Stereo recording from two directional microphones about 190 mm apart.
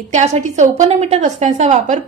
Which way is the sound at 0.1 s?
40° right (ahead or behind).